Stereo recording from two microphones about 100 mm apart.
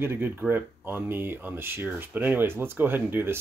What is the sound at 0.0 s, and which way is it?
Speech, 20° right (ahead or behind).